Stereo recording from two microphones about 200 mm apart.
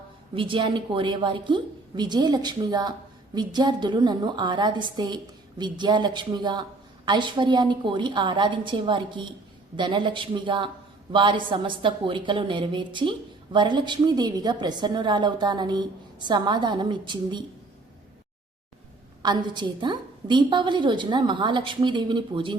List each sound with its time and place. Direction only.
0.3 s a woman's voice: 25° right (ahead or behind)
19.2 s a woman's voice: 20° right (ahead or behind)